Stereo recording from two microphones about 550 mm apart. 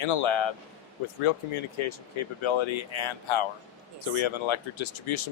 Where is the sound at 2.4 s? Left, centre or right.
Left.